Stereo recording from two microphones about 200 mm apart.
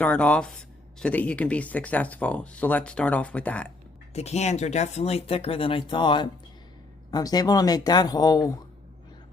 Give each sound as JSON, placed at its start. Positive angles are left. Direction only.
{"t": 0.0, "sound": "speech", "side_deg": 5}
{"t": 4.1, "sound": "speech", "side_deg": 35}